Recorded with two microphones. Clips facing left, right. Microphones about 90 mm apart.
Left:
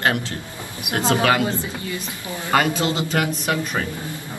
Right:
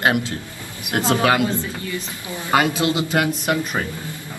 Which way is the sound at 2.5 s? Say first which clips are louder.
Right 1 dB; 15° right (ahead or behind).